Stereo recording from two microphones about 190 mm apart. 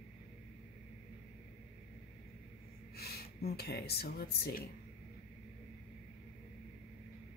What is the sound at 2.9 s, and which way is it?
Speech, 55° left (ahead or behind).